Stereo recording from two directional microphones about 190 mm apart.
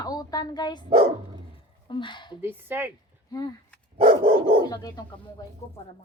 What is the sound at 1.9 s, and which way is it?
Speech, 25° left (ahead or behind).